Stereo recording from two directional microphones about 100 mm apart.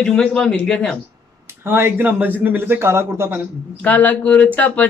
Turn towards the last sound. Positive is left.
turn(degrees=15)  # may be behind; listen again after turning